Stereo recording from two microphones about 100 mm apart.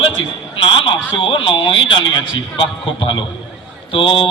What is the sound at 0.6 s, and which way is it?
A man's voice, 60° left (ahead or behind).